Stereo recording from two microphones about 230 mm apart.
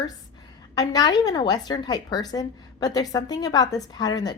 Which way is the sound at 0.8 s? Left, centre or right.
Centre.